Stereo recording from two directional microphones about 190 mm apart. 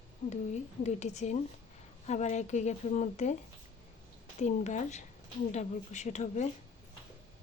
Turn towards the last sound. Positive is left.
turn(degrees=40)  # may be behind; listen again after turning